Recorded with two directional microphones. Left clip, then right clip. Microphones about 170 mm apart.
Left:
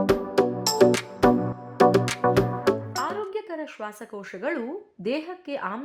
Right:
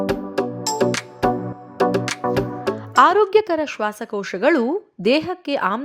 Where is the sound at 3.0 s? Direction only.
55° right (ahead or behind).